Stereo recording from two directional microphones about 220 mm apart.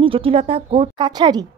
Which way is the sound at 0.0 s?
25° right (ahead or behind).